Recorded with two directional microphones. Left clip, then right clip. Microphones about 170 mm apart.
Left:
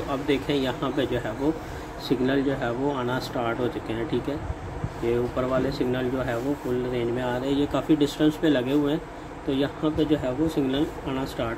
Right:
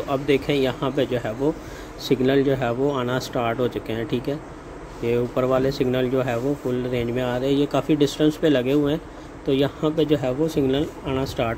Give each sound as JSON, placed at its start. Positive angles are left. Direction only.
{"t": 0.1, "sound": "speech", "side_deg": -50}